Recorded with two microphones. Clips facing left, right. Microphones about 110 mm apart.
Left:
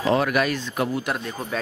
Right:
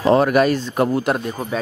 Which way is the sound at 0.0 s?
35° right (ahead or behind).